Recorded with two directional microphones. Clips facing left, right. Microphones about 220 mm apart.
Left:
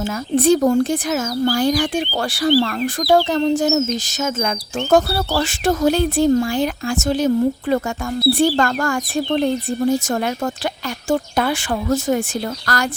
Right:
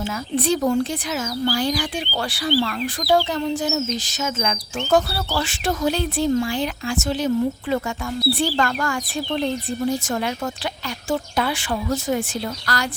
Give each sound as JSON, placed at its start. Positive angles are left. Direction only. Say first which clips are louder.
{"t": 0.0, "sound": "speech", "louder": "left 6 dB", "side_deg": 45}